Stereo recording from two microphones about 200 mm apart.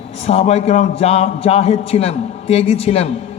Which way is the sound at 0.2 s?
30° left (ahead or behind).